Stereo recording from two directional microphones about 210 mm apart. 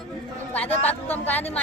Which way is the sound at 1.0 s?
10° left (ahead or behind).